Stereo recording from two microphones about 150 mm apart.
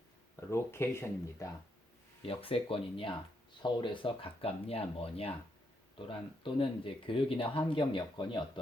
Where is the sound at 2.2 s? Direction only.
40° left (ahead or behind).